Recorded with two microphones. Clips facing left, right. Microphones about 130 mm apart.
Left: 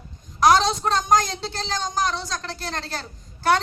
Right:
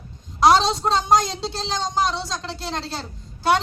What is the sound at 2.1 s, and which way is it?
Speech, 15° right (ahead or behind).